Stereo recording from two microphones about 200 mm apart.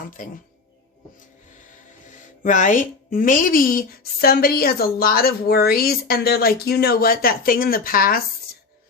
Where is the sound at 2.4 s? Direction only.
40° left (ahead or behind).